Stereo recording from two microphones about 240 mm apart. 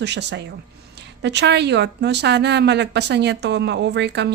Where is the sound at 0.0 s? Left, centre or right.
Right.